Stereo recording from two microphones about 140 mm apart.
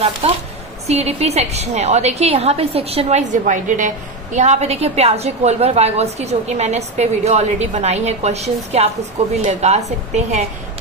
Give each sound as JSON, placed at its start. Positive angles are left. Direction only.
{"t": 0.2, "sound": "a woman's voice", "side_deg": -45}